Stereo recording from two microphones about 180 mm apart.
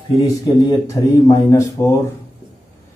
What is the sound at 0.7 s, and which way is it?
A man's voice, 15° left (ahead or behind).